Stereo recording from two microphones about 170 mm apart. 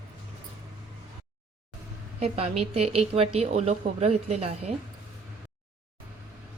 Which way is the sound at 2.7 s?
35° right (ahead or behind).